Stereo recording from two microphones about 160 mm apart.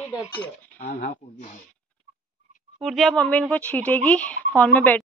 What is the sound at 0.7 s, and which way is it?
Speech, 60° left (ahead or behind).